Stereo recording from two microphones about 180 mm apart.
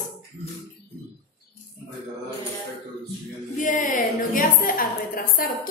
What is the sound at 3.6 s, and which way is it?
A woman's voice, 45° left (ahead or behind).